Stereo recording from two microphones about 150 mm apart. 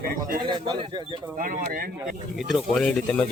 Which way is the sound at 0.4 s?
30° right (ahead or behind).